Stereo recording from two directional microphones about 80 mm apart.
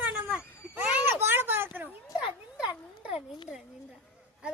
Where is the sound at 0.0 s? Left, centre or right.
Right.